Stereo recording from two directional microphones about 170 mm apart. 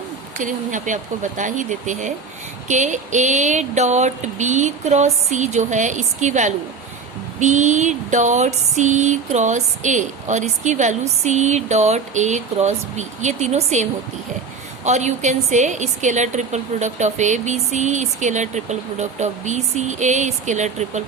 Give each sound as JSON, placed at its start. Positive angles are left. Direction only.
{"t": 0.3, "sound": "a woman's voice", "side_deg": -50}
{"t": 14.8, "sound": "a woman's voice", "side_deg": -45}